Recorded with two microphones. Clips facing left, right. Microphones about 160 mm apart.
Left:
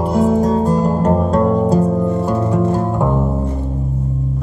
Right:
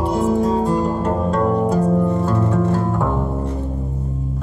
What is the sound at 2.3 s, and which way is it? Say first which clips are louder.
Music: left 2 dB; 15° left (ahead or behind).